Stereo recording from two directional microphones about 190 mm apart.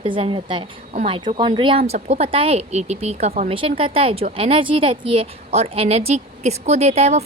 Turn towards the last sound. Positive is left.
turn(degrees=-35)  # may be behind; listen again after turning